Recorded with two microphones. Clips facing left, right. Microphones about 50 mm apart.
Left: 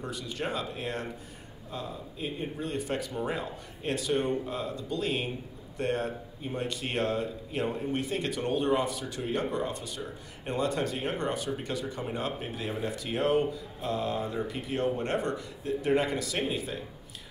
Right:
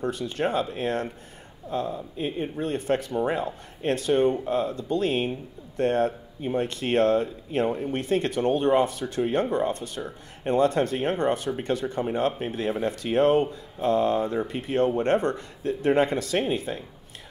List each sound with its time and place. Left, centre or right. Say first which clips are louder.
0.0 s speech: right 8 dB; right